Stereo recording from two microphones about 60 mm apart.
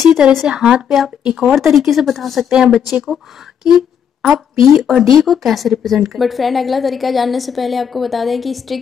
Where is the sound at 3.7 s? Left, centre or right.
Centre.